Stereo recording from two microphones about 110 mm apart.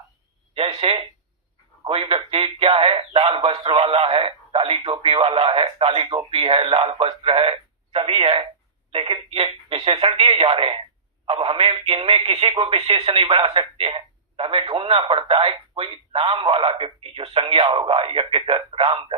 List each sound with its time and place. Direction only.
0.5 s a sound: 55° right (ahead or behind)
1.9 s a woman's voice: 60° right (ahead or behind)
13.4 s speech: 60° right (ahead or behind)